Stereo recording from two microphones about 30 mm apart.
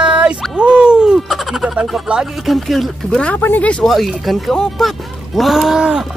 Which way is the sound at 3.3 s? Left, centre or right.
Left.